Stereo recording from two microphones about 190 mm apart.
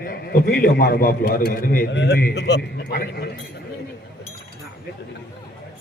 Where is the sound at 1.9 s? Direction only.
60° left (ahead or behind).